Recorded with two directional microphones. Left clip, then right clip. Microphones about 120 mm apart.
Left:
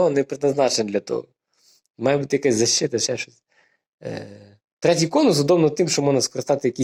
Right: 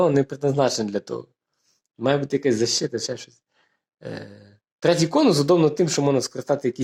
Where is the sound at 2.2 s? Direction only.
5° left (ahead or behind).